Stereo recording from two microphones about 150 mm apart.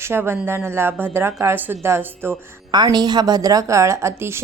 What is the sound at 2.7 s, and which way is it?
A woman's voice, 30° right (ahead or behind).